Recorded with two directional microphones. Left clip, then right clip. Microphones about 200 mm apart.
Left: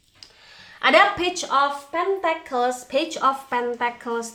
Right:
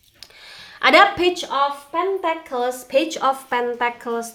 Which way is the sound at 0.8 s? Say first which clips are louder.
Right 3 dB; 25° right (ahead or behind).